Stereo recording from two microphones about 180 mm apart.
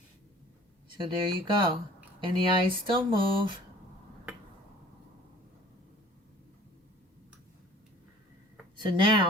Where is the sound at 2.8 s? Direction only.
25° right (ahead or behind).